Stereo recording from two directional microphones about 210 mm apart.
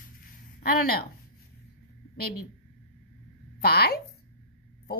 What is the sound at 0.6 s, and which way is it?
Speech, 45° left (ahead or behind).